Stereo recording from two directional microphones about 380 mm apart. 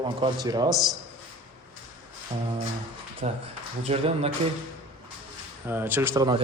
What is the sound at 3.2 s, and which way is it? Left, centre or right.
A man's voice, centre.